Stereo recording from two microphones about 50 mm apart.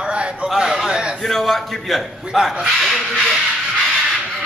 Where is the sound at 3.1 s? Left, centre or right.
Centre.